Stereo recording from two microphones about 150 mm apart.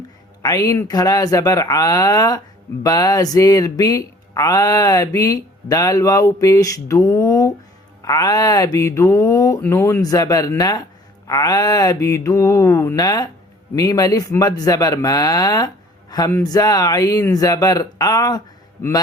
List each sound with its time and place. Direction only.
0.4 s speech: 25° left (ahead or behind)